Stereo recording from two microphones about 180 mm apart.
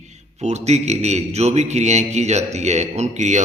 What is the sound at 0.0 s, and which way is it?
A man's voice, 40° right (ahead or behind).